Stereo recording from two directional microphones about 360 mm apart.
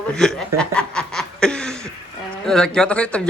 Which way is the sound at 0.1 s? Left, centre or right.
Centre.